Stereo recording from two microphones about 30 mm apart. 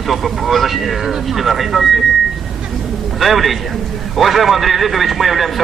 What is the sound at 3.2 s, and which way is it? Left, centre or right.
A man's voice, centre.